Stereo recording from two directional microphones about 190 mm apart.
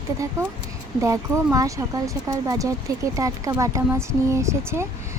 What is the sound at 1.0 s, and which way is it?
Speech, 15° right (ahead or behind).